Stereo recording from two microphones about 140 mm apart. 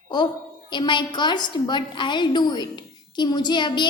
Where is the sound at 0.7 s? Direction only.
35° left (ahead or behind).